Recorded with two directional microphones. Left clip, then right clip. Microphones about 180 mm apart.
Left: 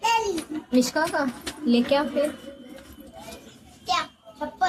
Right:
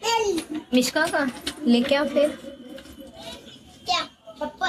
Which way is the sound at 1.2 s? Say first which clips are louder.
Right 2 dB; centre (ahead or behind).